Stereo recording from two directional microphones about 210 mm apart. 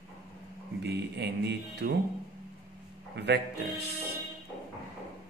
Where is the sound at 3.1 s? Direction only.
55° right (ahead or behind).